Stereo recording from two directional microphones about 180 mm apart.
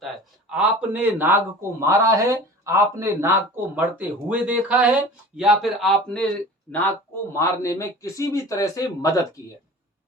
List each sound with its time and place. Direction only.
0.5 s a man's voice: 10° right (ahead or behind); by 9.0 s 20° left (ahead or behind)